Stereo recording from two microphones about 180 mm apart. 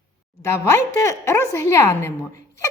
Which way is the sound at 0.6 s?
15° left (ahead or behind).